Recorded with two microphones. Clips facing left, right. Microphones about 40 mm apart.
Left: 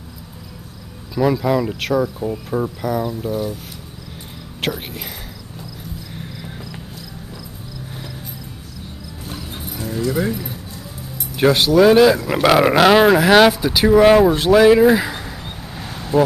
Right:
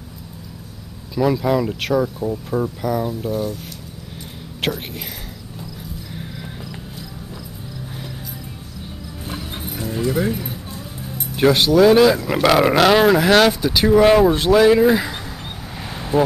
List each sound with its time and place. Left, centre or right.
1.1 s speech: centre
4.6 s speech: centre
9.3 s music: right
11.3 s speech: centre